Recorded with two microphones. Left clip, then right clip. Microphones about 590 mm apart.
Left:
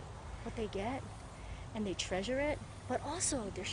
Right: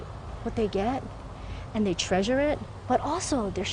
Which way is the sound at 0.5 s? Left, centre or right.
Right.